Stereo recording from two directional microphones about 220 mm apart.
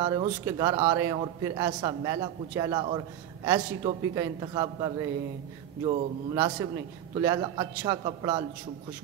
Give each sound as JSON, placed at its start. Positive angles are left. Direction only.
{"t": 0.0, "sound": "a man's voice", "side_deg": -20}